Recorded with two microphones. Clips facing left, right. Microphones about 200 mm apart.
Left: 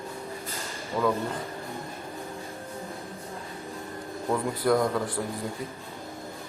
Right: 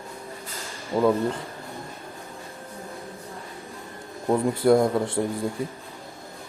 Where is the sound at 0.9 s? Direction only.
20° right (ahead or behind).